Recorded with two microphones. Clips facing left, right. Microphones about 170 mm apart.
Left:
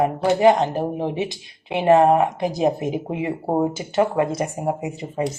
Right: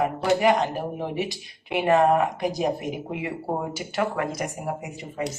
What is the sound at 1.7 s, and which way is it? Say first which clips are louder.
A woman's voice: left 4 dB; 25° left (ahead or behind).